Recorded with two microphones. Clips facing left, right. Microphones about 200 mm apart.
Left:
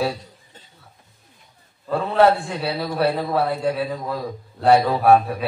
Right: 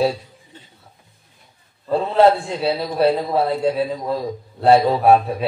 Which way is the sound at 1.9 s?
25° right (ahead or behind).